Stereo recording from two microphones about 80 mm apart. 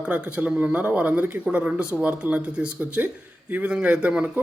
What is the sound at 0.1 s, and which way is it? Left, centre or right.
Speech, centre.